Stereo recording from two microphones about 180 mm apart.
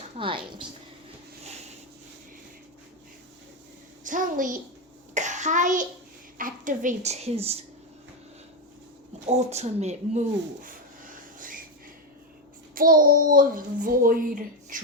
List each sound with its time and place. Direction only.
0.2 s a woman's voice: 30° right (ahead or behind)
4.0 s a child's voice: 45° right (ahead or behind)
5.1 s cough: 45° right (ahead or behind)
6.3 s a woman's voice: 50° right (ahead or behind)
9.2 s speech: 35° right (ahead or behind)
12.7 s a child's voice: 50° right (ahead or behind)